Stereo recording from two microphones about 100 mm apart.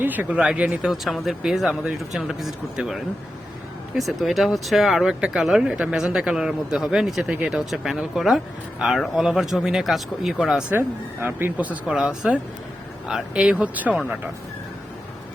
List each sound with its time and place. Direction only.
0.0 s speech: 15° right (ahead or behind)
0.9 s speech: centre (ahead or behind)
10.7 s speech: 20° right (ahead or behind)